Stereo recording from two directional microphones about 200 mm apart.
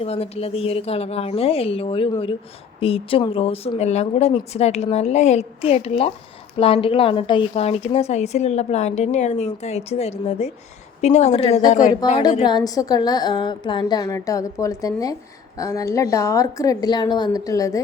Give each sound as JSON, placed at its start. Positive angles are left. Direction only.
{"t": 0.0, "sound": "a woman's voice", "side_deg": 30}
{"t": 12.4, "sound": "a woman's voice", "side_deg": 20}